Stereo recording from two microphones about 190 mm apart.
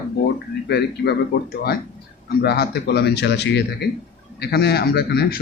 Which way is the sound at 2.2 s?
60° left (ahead or behind).